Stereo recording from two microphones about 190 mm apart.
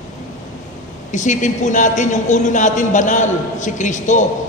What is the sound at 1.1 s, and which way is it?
A woman's voice, 40° left (ahead or behind).